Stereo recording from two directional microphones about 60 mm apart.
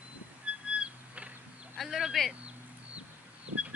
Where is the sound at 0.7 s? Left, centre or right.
Right.